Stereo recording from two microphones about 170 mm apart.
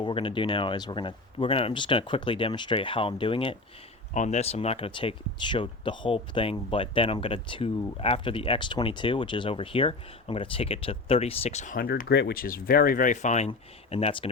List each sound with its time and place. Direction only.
0.0 s speech: 30° left (ahead or behind)
4.1 s speech: 45° left (ahead or behind)